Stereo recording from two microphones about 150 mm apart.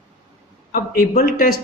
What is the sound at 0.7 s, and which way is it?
Speech, 75° left (ahead or behind).